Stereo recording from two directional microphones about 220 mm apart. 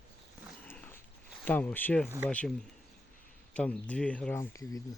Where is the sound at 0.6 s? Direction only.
10° left (ahead or behind).